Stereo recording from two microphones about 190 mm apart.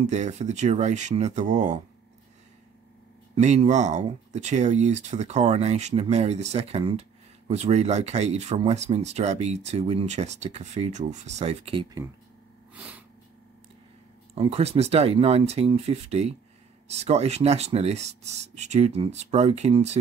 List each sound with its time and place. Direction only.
0.0 s speech: 35° right (ahead or behind)
3.3 s speech: 40° right (ahead or behind)
12.7 s sneeze: 10° right (ahead or behind)
14.3 s speech: 30° right (ahead or behind)